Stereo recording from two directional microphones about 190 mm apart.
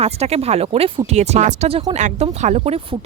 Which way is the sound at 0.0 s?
35° right (ahead or behind).